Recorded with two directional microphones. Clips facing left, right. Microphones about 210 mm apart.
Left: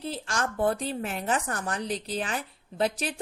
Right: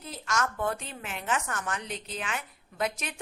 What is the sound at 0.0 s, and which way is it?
Speech, 30° left (ahead or behind).